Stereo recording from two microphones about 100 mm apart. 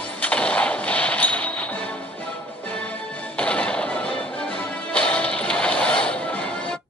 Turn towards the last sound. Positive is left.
turn(degrees=10)  # may be behind; listen again after turning